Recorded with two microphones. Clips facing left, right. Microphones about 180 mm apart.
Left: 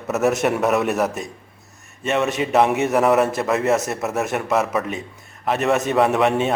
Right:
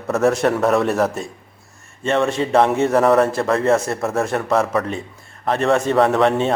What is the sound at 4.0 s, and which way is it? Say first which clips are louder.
A man's voice: right 2 dB; 5° left (ahead or behind).